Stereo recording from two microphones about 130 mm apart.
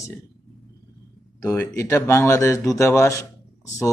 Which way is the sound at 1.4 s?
25° left (ahead or behind).